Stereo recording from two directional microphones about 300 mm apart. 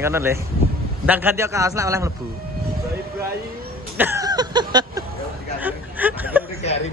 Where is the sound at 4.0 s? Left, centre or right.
Centre.